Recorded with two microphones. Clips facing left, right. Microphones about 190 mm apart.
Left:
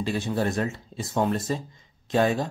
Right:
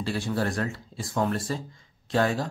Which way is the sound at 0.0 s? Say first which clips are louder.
Left 2 dB; 20° left (ahead or behind).